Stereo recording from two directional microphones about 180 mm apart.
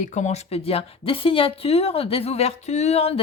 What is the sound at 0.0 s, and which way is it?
Speech, 40° left (ahead or behind).